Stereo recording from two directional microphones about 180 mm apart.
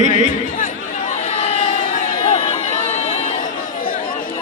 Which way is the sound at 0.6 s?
40° left (ahead or behind).